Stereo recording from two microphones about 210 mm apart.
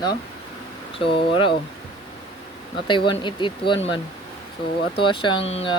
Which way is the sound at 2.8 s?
25° left (ahead or behind).